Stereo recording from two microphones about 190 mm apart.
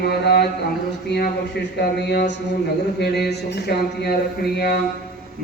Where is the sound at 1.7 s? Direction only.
60° left (ahead or behind).